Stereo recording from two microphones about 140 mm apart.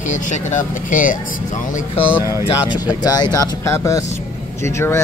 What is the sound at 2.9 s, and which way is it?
Speech, 30° left (ahead or behind).